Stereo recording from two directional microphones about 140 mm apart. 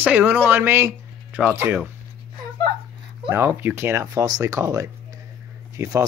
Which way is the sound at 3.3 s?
15° right (ahead or behind).